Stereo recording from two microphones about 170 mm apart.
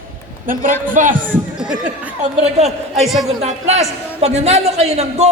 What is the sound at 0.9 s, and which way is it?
Speech, 50° right (ahead or behind).